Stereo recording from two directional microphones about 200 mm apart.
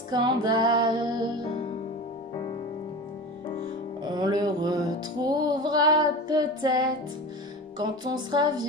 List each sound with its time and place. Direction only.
0.1 s female singing: 20° right (ahead or behind)
4.0 s music: 20° right (ahead or behind)
7.8 s female singing: 20° right (ahead or behind)